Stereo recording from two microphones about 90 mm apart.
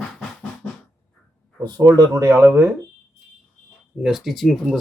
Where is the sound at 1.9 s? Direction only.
35° right (ahead or behind).